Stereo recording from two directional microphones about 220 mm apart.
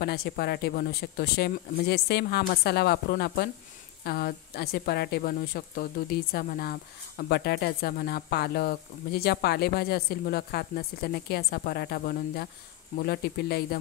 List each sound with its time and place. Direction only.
0.0 s speech: 45° left (ahead or behind)